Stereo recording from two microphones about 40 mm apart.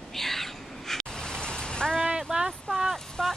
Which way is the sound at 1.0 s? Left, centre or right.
Centre.